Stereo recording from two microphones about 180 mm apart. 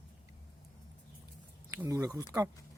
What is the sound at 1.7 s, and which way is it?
Speech, 15° right (ahead or behind).